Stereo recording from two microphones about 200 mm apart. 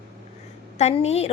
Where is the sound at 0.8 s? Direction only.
30° left (ahead or behind).